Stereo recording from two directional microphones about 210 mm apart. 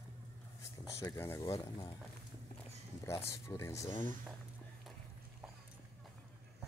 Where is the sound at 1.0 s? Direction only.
10° left (ahead or behind).